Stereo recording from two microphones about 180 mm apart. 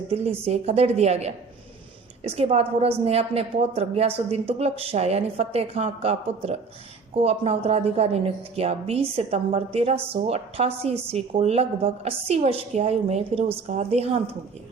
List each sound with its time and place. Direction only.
0.1 s speech: 35° right (ahead or behind)